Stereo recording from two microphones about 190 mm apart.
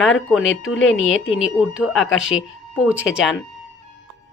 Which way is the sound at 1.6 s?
5° right (ahead or behind).